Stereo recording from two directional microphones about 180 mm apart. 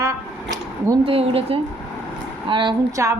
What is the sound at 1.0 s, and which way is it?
A woman's voice, 35° right (ahead or behind).